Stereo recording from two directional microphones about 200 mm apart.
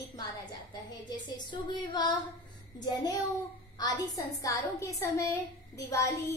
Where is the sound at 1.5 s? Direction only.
20° left (ahead or behind).